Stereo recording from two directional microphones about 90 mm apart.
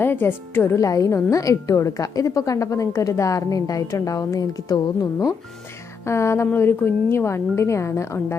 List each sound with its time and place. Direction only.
0.0 s speech: 25° left (ahead or behind)
0.8 s a woman's voice: 40° left (ahead or behind)
6.1 s a woman's voice: 30° left (ahead or behind)